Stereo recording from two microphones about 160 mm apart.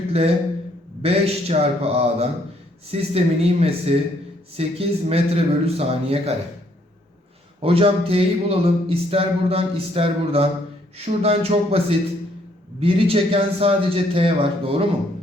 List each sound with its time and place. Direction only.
1.0 s speech: 40° right (ahead or behind)
7.6 s speech: 35° right (ahead or behind)